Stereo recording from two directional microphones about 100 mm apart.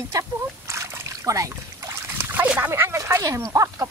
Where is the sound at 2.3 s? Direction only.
15° right (ahead or behind).